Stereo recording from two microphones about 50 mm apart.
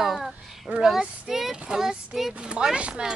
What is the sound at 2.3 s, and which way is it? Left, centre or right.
Speech, right.